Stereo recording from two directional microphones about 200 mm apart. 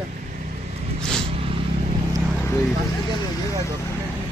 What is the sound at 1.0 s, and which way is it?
Vehicle, 5° left (ahead or behind).